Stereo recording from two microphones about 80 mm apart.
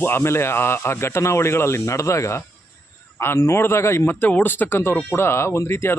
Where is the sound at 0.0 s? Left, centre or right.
Left.